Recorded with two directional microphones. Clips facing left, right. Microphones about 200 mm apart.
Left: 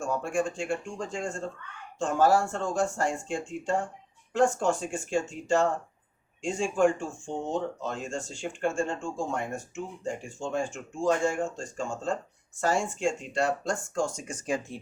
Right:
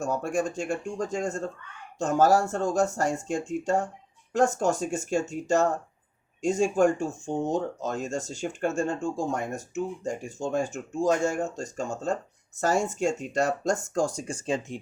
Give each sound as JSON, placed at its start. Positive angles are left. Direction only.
{"t": 0.0, "sound": "speech", "side_deg": -40}